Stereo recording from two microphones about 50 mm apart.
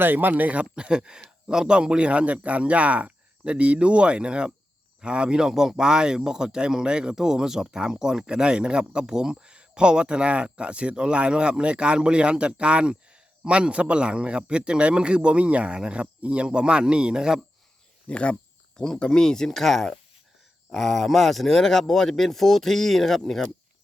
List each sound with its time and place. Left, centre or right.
0.0 s a man's voice: right; by 17.4 s centre
18.1 s speech: left; by 23.5 s centre